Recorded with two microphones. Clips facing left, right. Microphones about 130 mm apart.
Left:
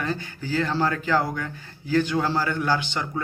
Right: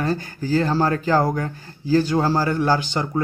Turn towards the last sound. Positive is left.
turn(degrees=-40)  # may be behind; listen again after turning